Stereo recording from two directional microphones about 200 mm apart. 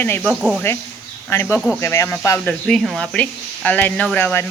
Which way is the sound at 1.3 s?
10° left (ahead or behind).